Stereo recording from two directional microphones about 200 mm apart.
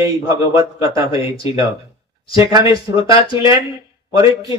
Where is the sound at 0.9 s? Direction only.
25° left (ahead or behind).